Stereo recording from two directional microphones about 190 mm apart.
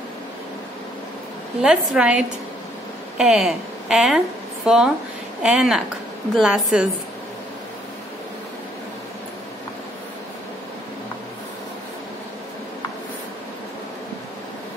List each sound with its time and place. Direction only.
1.6 s a woman's voice: 5° right (ahead or behind)